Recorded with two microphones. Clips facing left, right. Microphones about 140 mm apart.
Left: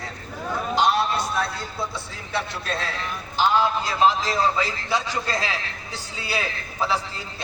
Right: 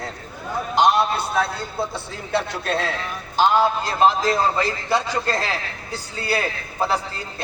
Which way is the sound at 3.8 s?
50° right (ahead or behind).